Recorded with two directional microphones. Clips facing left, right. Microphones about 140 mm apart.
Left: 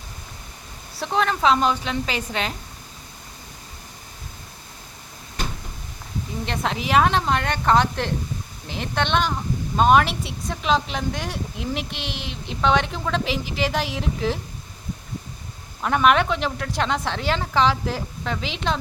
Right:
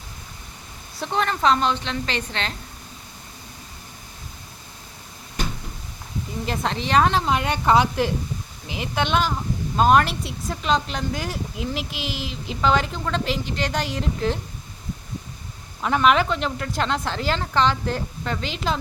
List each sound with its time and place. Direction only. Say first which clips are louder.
0.9 s a woman's voice: left 2 dB; centre (ahead or behind)
6.4 s speech: even; centre (ahead or behind)
15.8 s speech: even; centre (ahead or behind)